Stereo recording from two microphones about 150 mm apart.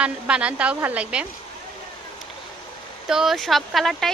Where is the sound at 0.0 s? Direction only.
5° right (ahead or behind).